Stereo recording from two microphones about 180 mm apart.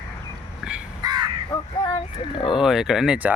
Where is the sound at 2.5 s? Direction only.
Centre (ahead or behind).